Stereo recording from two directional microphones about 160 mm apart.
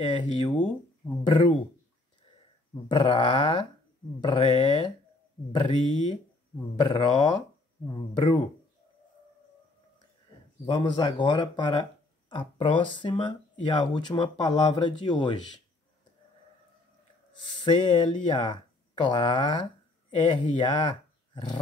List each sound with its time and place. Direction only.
0.0 s speech: 30° left (ahead or behind)
2.9 s speech: 30° left (ahead or behind)
5.7 s speech: 50° left (ahead or behind)
6.8 s speech: 30° left (ahead or behind)
10.6 s speech: 25° left (ahead or behind)
17.6 s speech: 30° left (ahead or behind)